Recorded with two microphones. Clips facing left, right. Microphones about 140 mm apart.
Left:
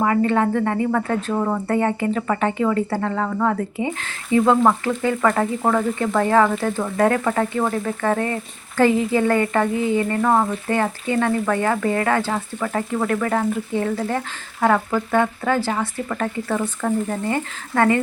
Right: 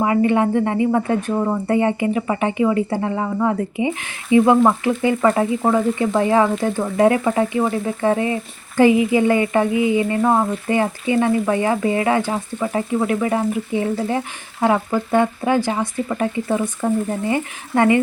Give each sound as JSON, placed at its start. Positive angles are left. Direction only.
{"t": 0.0, "sound": "speech", "side_deg": -15}